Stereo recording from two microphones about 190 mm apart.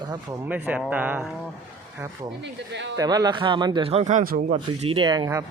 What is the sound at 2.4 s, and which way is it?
Speech, 70° right (ahead or behind).